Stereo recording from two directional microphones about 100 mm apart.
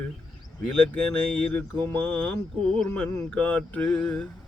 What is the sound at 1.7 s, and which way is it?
Mantra, 55° right (ahead or behind).